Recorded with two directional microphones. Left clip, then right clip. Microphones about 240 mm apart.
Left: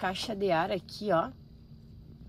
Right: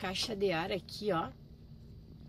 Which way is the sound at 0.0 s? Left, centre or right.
Centre.